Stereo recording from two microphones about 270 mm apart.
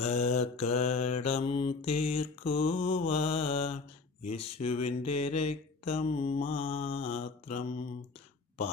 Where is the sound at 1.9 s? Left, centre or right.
Left.